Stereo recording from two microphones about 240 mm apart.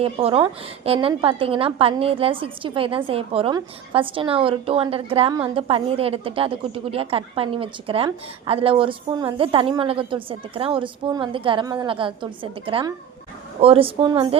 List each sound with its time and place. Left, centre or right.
0.0 s a woman's voice: right